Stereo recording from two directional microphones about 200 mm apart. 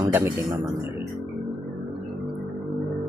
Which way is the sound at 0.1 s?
10° right (ahead or behind).